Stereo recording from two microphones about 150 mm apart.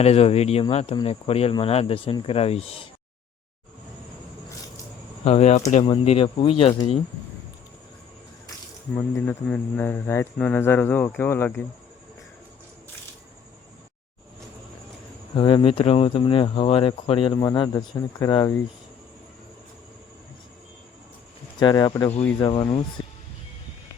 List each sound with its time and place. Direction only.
0.0 s speech: 45° left (ahead or behind)
5.2 s speech: 45° left (ahead or behind)
9.0 s speech: 15° left (ahead or behind)
15.4 s speech: 35° left (ahead or behind)
17.3 s speech: 25° left (ahead or behind)
21.6 s speech: 25° left (ahead or behind)
23.0 s music: 30° left (ahead or behind)